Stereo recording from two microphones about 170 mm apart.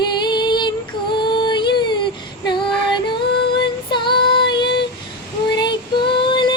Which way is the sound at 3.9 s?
30° left (ahead or behind).